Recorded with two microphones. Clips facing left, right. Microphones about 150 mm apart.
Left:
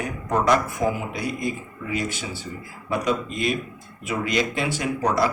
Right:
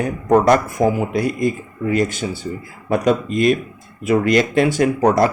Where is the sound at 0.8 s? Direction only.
55° right (ahead or behind).